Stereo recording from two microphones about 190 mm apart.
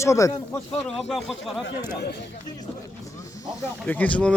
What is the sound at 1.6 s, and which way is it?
Speech, 65° left (ahead or behind).